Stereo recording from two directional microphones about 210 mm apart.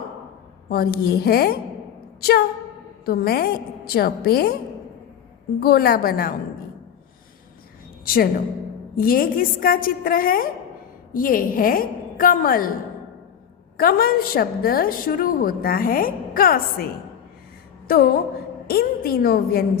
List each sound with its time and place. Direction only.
0.7 s a woman's voice: 45° left (ahead or behind)
3.1 s a woman's voice: 45° left (ahead or behind)
5.5 s a woman's voice: 45° left (ahead or behind)
8.0 s a woman's voice: 45° left (ahead or behind)
13.7 s a woman's voice: 45° left (ahead or behind)
17.8 s a woman's voice: 45° left (ahead or behind)